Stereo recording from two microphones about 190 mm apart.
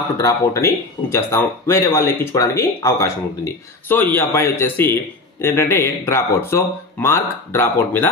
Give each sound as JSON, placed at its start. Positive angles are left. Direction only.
{"t": 0.2, "sound": "speech", "side_deg": 15}